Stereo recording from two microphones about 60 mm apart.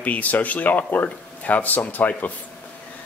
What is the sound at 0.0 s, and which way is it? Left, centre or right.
Speech, left.